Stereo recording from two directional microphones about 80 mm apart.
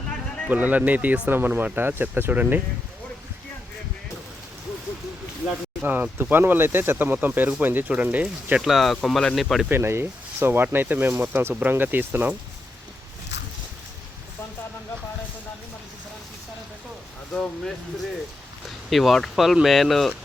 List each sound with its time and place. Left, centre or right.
0.4 s speech: centre
5.8 s speech: right
8.6 s speech: centre
9.6 s speech: right
17.3 s speech: centre
18.9 s speech: centre